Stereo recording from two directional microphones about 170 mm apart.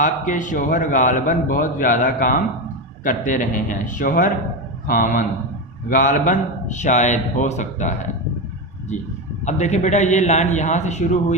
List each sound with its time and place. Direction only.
0.0 s a man's voice: 50° left (ahead or behind)
9.5 s a man's voice: 45° left (ahead or behind)